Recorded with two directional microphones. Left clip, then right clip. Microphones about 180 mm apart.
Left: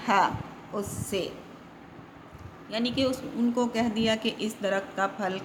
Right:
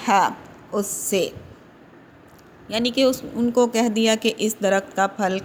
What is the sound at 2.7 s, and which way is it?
Speech, 40° right (ahead or behind).